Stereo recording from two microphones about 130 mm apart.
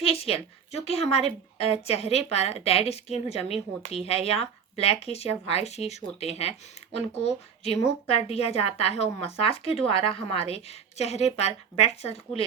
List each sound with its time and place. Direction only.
0.0 s a woman's voice: 50° left (ahead or behind)